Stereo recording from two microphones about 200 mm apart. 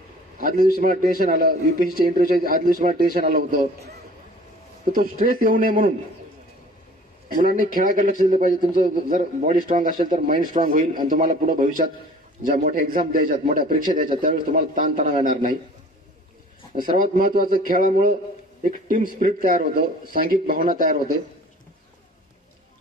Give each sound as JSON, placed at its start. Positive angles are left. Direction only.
{"t": 0.4, "sound": "a sound", "side_deg": -45}
{"t": 0.7, "sound": "a man's voice", "side_deg": -45}
{"t": 4.9, "sound": "a man's voice", "side_deg": -45}
{"t": 7.2, "sound": "a man's voice", "side_deg": -45}
{"t": 17.0, "sound": "a man's voice", "side_deg": -45}